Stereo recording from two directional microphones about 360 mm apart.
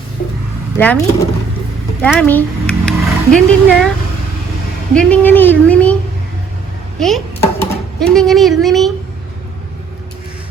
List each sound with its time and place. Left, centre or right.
0.2 s a sound: left
0.8 s speech: centre
4.9 s speech: centre
7.0 s speech: centre